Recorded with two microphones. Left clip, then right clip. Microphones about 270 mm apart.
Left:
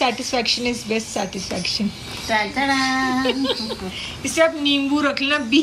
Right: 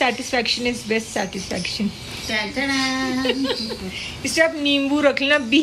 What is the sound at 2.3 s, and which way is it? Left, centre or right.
A woman's voice, centre.